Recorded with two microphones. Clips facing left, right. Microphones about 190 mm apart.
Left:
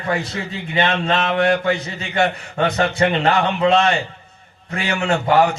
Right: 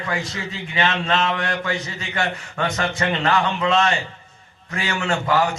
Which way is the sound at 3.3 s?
60° left (ahead or behind).